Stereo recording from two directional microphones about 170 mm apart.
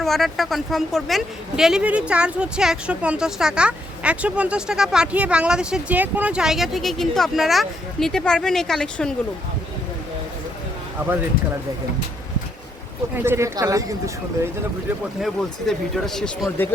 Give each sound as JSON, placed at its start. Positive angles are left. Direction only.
{"t": 0.0, "sound": "a woman's voice", "side_deg": 0}
{"t": 13.1, "sound": "speech", "side_deg": -15}
{"t": 15.2, "sound": "a woman's voice", "side_deg": 0}